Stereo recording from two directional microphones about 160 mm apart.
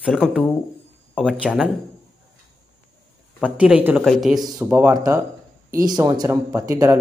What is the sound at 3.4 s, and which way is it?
Speech, 5° right (ahead or behind).